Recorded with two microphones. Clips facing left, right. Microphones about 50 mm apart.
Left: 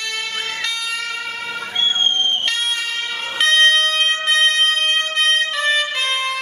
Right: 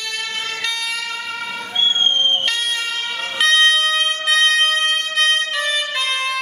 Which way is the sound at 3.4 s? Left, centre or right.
Centre.